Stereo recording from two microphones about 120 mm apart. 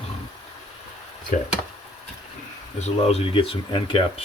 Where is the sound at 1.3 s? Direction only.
90° left.